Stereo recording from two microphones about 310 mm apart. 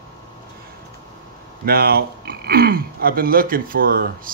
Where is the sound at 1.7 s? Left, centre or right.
Right.